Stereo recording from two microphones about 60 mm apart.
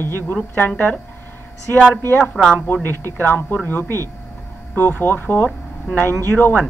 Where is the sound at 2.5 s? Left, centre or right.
Left.